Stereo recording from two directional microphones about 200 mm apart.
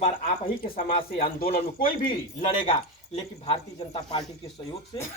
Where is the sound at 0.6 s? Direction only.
45° left (ahead or behind).